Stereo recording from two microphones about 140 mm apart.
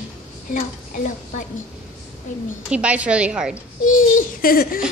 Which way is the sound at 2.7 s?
10° right (ahead or behind).